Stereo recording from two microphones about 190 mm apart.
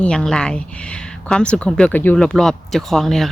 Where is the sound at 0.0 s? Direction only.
5° left (ahead or behind).